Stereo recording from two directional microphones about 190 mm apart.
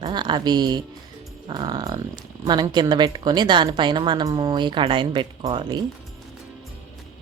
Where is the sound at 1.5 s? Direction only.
20° right (ahead or behind).